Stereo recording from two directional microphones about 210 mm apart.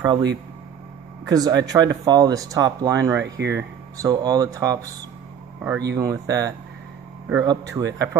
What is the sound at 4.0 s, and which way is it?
Speech, 20° right (ahead or behind).